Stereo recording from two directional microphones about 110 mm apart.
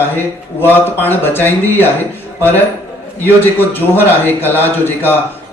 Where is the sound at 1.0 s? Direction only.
20° left (ahead or behind).